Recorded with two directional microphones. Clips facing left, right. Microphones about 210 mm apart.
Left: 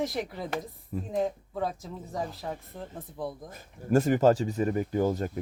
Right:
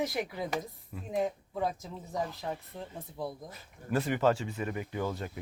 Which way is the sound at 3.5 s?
45° left (ahead or behind).